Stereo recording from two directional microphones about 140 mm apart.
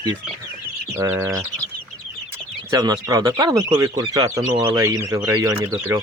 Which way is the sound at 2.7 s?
25° right (ahead or behind).